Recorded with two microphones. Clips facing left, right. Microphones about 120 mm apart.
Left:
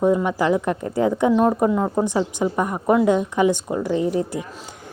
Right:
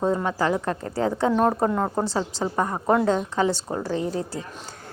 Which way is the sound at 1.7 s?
Centre (ahead or behind).